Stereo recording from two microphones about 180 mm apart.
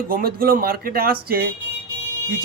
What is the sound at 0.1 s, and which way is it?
Speech, 55° right (ahead or behind).